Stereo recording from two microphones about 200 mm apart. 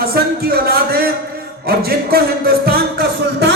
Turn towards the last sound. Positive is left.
turn(degrees=-55)  # may be behind; listen again after turning